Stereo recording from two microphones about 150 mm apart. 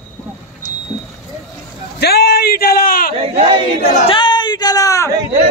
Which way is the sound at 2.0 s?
90° left.